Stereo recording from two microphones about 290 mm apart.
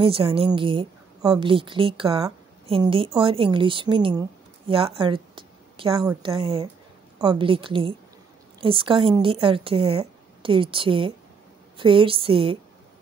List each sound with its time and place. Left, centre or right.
0.0 s a woman's voice: centre